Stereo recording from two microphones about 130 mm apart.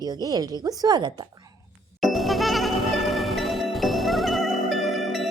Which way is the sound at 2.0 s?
Centre (ahead or behind).